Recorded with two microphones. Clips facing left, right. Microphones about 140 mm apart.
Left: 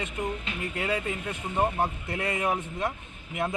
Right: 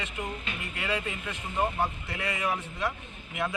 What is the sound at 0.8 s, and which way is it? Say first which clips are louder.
Speech: left 2 dB; 45° left (ahead or behind).